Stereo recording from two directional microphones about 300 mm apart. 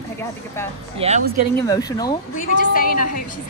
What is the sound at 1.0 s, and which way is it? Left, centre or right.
Speech, centre.